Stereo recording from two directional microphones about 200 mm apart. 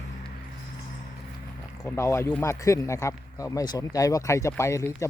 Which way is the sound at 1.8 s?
15° left (ahead or behind).